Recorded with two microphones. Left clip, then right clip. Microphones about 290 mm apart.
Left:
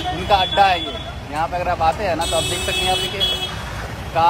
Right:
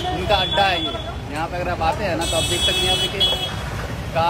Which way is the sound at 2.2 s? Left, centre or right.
Centre.